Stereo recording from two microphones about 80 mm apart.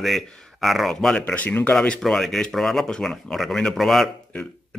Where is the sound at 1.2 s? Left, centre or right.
Centre.